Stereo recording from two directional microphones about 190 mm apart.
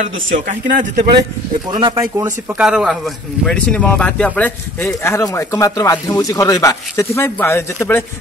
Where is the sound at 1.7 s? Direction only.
25° right (ahead or behind).